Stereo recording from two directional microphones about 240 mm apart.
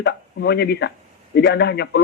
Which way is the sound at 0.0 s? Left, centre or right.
Left.